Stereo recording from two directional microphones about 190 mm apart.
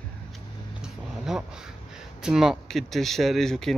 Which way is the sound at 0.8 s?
5° right (ahead or behind).